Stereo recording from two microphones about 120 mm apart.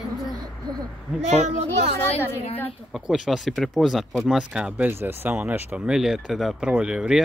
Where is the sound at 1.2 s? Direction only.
65° right (ahead or behind).